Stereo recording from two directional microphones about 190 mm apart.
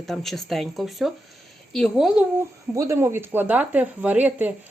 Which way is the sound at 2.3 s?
15° right (ahead or behind).